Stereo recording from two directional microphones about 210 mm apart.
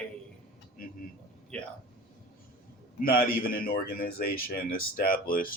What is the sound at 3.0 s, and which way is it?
Speech, 45° left (ahead or behind).